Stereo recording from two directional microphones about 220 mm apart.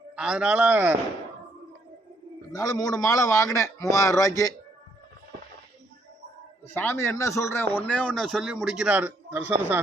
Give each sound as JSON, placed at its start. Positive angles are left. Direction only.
{"t": 0.2, "sound": "a man's voice", "side_deg": -5}
{"t": 2.5, "sound": "a man's voice", "side_deg": 15}
{"t": 6.7, "sound": "a man's voice", "side_deg": 10}